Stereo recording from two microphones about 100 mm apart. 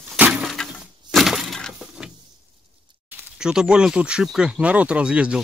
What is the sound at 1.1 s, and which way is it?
Breaking, centre (ahead or behind).